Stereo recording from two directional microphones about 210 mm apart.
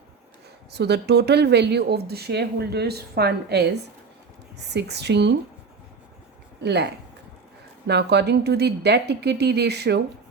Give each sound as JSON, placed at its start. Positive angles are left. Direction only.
{"t": 0.7, "sound": "speech", "side_deg": -50}
{"t": 4.7, "sound": "speech", "side_deg": -55}
{"t": 6.6, "sound": "speech", "side_deg": -50}